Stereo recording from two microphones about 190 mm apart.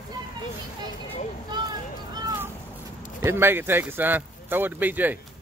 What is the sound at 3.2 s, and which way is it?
Speech, 10° right (ahead or behind).